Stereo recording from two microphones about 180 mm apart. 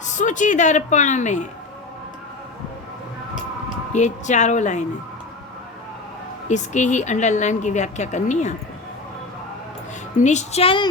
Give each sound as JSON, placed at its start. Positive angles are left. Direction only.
{"t": 0.1, "sound": "a woman's voice", "side_deg": 45}
{"t": 3.9, "sound": "a woman's voice", "side_deg": 40}
{"t": 6.5, "sound": "a woman's voice", "side_deg": 40}
{"t": 10.2, "sound": "a woman's voice", "side_deg": 40}